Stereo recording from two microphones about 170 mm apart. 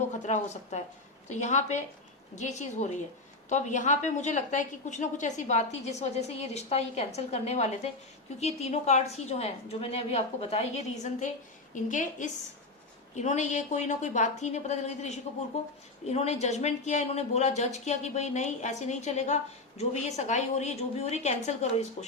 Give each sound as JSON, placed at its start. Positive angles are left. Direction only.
{"t": 0.2, "sound": "a woman's voice", "side_deg": 45}